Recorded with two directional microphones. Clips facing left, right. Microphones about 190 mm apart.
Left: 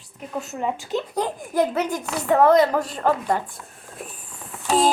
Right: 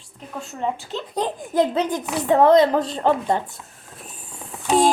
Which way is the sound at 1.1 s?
20° right (ahead or behind).